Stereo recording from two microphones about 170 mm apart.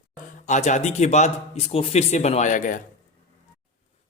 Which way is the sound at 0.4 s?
45° left (ahead or behind).